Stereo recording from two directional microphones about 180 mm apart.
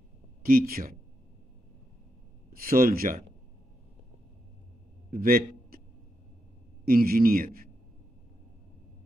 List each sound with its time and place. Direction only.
0.4 s speech: 55° right (ahead or behind)
2.5 s a man's voice: 55° right (ahead or behind)
5.1 s a man's voice: 55° right (ahead or behind)
6.9 s a man's voice: 55° right (ahead or behind)